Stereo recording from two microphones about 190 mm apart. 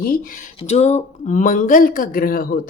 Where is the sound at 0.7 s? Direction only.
35° left (ahead or behind).